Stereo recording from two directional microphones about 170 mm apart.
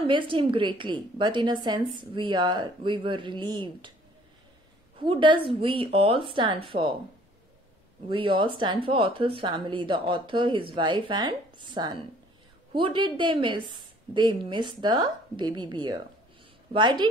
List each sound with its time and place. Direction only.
0.0 s speech: 30° right (ahead or behind)
5.0 s a woman's voice: 30° right (ahead or behind)
8.1 s speech: 30° right (ahead or behind)